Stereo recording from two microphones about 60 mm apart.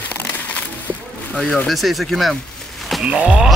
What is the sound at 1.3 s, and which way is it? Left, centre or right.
Speech, centre.